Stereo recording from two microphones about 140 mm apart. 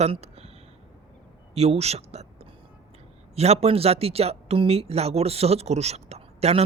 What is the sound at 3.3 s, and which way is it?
Speech, 50° right (ahead or behind).